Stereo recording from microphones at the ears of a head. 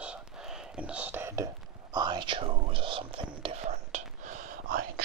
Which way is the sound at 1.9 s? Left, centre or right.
Right.